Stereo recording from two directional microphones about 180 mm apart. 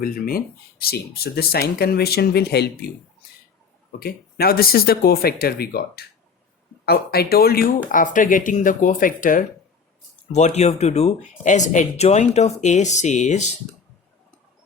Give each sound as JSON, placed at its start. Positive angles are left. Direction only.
{"t": 0.0, "sound": "speech", "side_deg": 55}
{"t": 4.0, "sound": "speech", "side_deg": 60}
{"t": 10.3, "sound": "speech", "side_deg": 40}